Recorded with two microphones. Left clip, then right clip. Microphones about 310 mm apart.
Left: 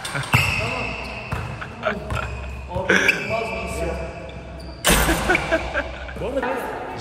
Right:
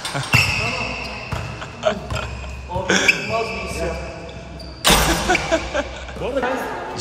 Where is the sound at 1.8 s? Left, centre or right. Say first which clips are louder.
Right 3 dB; centre.